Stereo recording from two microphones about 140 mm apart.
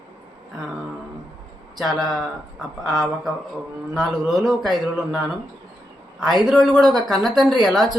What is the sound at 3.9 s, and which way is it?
Speech, 5° right (ahead or behind).